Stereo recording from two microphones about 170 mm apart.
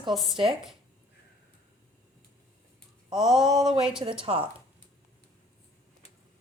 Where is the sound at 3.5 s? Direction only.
5° right (ahead or behind).